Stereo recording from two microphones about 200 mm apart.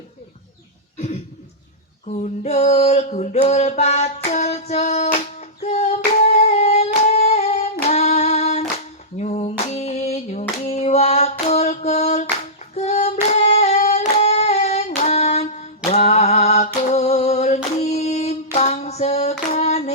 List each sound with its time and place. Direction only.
2.0 s a sound: 35° left (ahead or behind)
5.6 s humming: 35° left (ahead or behind)
9.1 s female singing: 35° left (ahead or behind)
13.3 s singing: 35° left (ahead or behind)
18.5 s hands: 35° left (ahead or behind)